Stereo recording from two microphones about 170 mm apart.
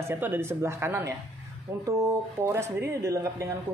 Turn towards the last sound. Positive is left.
turn(degrees=-20)  # may be behind; listen again after turning